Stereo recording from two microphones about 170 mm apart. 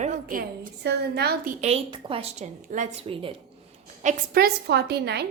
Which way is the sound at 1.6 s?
35° right (ahead or behind).